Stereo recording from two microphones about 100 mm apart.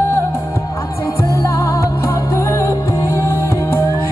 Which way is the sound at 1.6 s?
25° left (ahead or behind).